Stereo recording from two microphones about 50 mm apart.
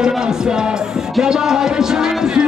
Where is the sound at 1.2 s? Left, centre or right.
Centre.